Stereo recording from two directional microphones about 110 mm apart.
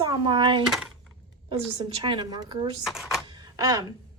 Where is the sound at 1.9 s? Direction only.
45° right (ahead or behind).